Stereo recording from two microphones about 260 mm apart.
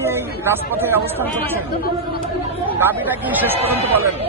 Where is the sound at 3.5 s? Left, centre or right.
Right.